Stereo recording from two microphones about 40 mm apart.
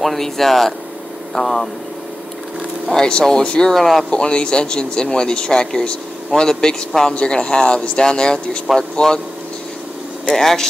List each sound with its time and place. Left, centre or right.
0.0 s a man's voice: centre
3.1 s speech: left
3.7 s a man's voice: centre
4.1 s a man's voice: left
10.2 s a man's voice: centre